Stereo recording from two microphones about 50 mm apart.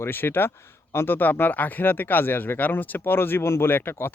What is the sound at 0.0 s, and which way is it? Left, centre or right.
Speech, left.